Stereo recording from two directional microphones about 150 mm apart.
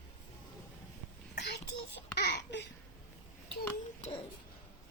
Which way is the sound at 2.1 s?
90° left.